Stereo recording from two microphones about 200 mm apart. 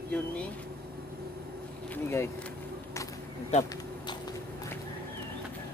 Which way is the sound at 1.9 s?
15° left (ahead or behind).